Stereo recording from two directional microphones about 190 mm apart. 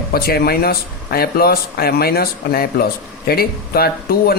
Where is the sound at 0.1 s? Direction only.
55° left (ahead or behind).